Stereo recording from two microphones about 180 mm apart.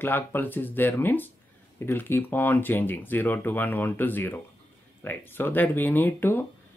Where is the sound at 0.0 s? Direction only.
10° left (ahead or behind).